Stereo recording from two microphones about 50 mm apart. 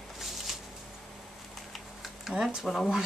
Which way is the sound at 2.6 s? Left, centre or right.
Centre.